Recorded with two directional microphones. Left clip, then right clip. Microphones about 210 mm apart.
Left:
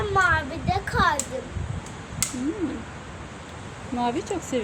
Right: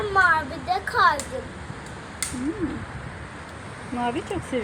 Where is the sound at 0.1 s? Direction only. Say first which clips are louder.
Right 2 dB; centre (ahead or behind).